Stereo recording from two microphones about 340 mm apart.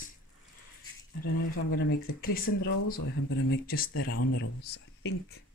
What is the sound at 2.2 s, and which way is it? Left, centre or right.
Speech, left.